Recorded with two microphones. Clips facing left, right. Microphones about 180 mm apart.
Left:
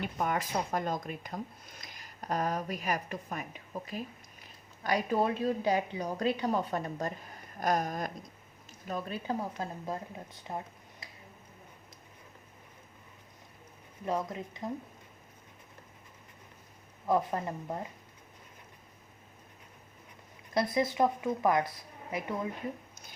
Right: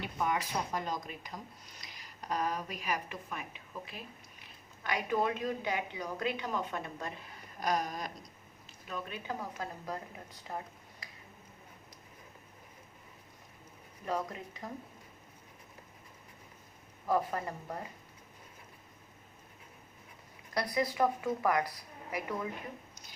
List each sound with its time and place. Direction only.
0.0 s speech: 50° left (ahead or behind)
7.6 s a sound: 50° left (ahead or behind)
8.9 s speech: 35° left (ahead or behind)
14.0 s speech: 20° left (ahead or behind)
17.1 s speech: 20° left (ahead or behind)
20.5 s speech: 25° left (ahead or behind)